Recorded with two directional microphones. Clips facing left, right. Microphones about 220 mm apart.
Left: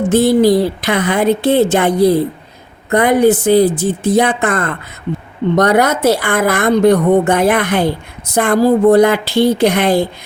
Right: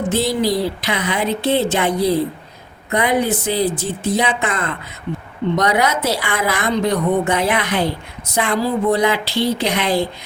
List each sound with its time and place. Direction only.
0.1 s a woman's voice: 50° left (ahead or behind)